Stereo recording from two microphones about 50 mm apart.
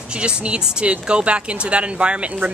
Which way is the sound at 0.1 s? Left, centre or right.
Centre.